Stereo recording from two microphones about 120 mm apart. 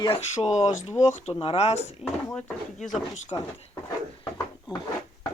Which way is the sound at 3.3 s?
40° left (ahead or behind).